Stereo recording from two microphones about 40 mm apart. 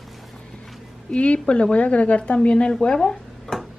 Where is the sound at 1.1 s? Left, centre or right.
Left.